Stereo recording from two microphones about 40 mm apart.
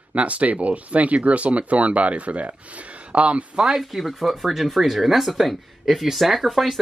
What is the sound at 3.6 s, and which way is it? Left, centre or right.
Speech, centre.